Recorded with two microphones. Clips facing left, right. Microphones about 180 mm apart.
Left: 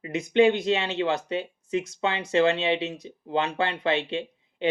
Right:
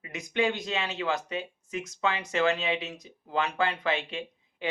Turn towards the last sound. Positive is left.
turn(degrees=30)  # may be behind; listen again after turning